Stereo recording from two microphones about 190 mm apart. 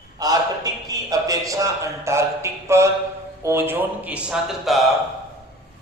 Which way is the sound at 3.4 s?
15° right (ahead or behind).